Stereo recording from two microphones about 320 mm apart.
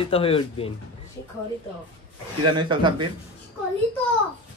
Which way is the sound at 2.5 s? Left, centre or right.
Centre.